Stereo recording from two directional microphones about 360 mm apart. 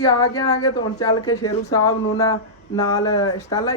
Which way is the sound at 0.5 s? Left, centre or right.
Left.